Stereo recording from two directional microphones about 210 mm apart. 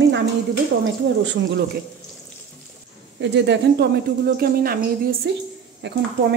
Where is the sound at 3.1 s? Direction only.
60° right (ahead or behind).